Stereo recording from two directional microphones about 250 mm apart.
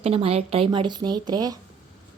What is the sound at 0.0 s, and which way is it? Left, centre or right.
A woman's voice, right.